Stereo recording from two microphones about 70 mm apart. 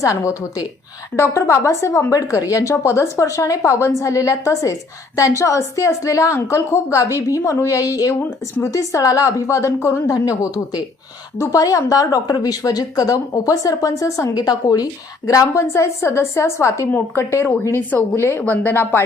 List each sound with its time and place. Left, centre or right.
0.0 s a woman's voice: left
1.1 s a woman's voice: left
15.3 s a woman's voice: left
18.4 s speech: left